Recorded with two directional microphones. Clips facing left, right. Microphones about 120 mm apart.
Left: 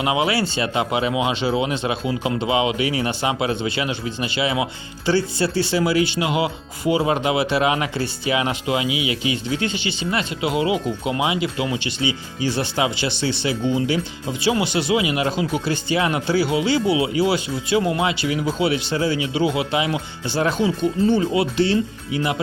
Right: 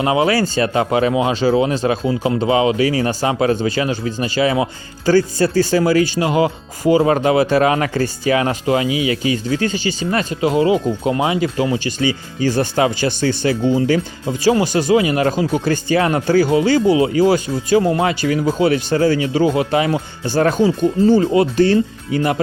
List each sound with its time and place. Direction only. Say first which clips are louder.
0.0 s speech: right 5 dB; 40° right (ahead or behind)